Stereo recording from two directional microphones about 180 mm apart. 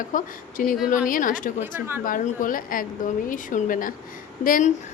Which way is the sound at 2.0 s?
50° left (ahead or behind).